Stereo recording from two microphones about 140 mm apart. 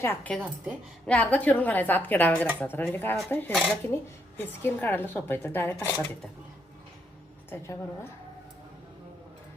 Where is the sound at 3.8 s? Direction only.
15° left (ahead or behind).